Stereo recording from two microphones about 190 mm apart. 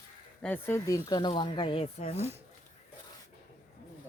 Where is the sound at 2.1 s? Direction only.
35° right (ahead or behind).